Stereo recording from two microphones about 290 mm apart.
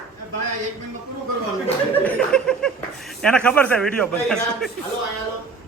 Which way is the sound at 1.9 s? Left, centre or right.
Centre.